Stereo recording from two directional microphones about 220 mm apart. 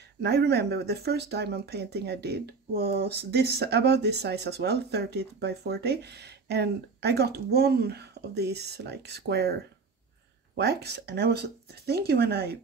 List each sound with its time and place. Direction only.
0.2 s speech: 50° right (ahead or behind)